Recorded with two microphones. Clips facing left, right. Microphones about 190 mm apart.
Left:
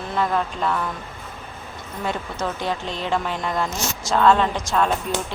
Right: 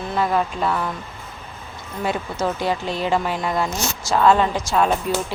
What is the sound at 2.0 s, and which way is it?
Speech, 5° right (ahead or behind).